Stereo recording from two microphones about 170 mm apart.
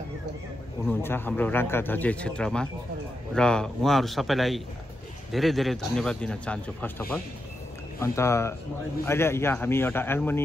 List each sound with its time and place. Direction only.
1.0 s a man's voice: 10° left (ahead or behind)